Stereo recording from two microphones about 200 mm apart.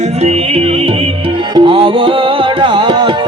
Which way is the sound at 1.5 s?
25° right (ahead or behind).